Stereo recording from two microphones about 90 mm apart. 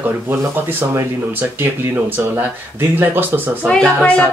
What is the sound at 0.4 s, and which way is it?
Speech, 30° right (ahead or behind).